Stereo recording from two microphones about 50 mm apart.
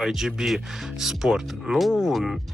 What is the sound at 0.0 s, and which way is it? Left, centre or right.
Speech, centre.